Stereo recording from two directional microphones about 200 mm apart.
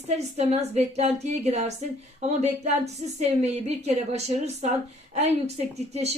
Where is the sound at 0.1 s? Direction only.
35° right (ahead or behind).